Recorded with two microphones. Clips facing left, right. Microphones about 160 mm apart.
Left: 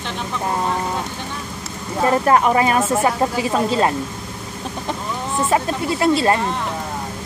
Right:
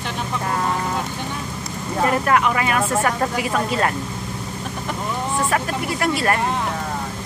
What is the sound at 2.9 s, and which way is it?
A woman's voice, 20° left (ahead or behind).